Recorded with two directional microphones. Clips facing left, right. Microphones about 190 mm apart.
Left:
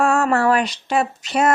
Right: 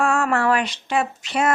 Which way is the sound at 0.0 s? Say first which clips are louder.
Left 3 dB; 40° left (ahead or behind).